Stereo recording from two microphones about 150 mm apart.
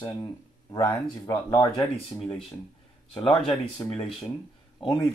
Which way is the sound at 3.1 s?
35° left (ahead or behind).